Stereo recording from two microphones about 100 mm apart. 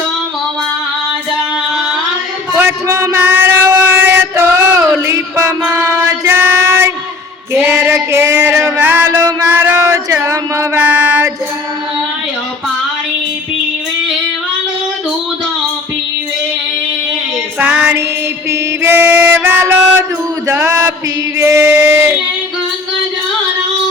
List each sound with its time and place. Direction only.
1.7 s carnatic music: 5° right (ahead or behind)
2.6 s a sound: 25° right (ahead or behind)
3.2 s child singing: 15° right (ahead or behind)
5.0 s a sound: 30° right (ahead or behind)
7.5 s female singing: 25° right (ahead or behind)
8.8 s music: 20° right (ahead or behind)
9.0 s music: 30° right (ahead or behind)
9.5 s a sound: 20° right (ahead or behind)
9.8 s a sound: 30° right (ahead or behind)
10.8 s music: 15° right (ahead or behind)
17.6 s child singing: 15° right (ahead or behind)
18.5 s music: 25° right (ahead or behind)
20.7 s mantra: 25° right (ahead or behind)
21.4 s child singing: 20° right (ahead or behind)